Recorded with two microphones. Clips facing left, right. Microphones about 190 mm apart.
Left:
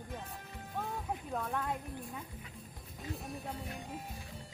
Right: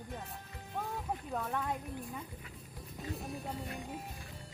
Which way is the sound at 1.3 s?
Centre (ahead or behind).